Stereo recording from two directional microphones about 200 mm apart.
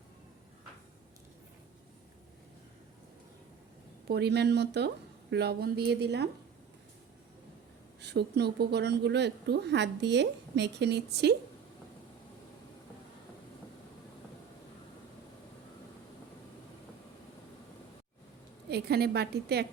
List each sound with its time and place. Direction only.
4.1 s a woman's voice: 55° right (ahead or behind)
8.0 s a woman's voice: 55° right (ahead or behind)
18.7 s a woman's voice: 55° right (ahead or behind)